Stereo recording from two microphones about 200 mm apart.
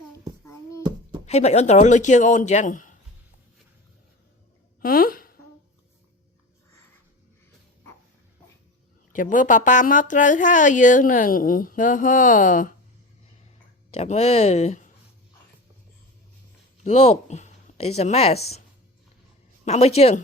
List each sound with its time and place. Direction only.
1.2 s a woman's voice: 35° left (ahead or behind)
4.8 s a sound: 45° left (ahead or behind)
9.1 s a woman's voice: 40° left (ahead or behind)
13.9 s a woman's voice: 30° left (ahead or behind)
16.8 s speech: 35° left (ahead or behind)
19.6 s a woman's voice: 35° left (ahead or behind)